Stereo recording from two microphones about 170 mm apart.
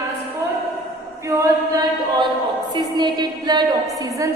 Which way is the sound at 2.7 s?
25° right (ahead or behind).